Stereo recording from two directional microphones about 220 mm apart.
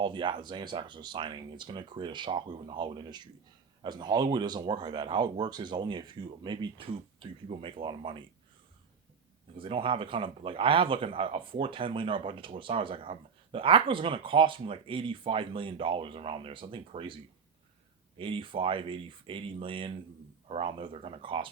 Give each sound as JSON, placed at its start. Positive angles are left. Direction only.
{"t": 0.0, "sound": "speech", "side_deg": -20}
{"t": 9.6, "sound": "speech", "side_deg": -25}
{"t": 18.2, "sound": "speech", "side_deg": -25}